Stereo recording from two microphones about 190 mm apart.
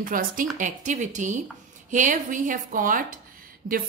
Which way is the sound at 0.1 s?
45° right (ahead or behind).